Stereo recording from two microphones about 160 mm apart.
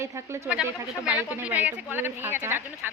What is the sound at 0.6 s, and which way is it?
Speech, 5° right (ahead or behind).